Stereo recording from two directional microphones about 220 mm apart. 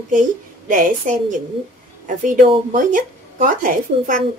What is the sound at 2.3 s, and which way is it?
Speech, 35° right (ahead or behind).